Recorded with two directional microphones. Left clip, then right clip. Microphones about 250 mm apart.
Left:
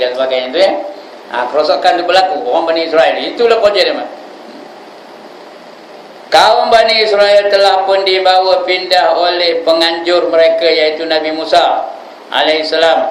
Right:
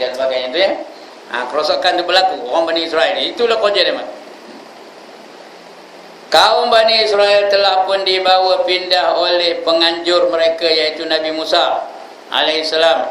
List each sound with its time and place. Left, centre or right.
0.3 s a man's voice: centre
6.3 s a man's voice: centre